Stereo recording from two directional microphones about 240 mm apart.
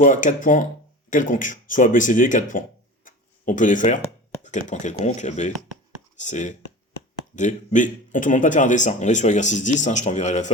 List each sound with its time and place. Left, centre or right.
0.0 s speech: left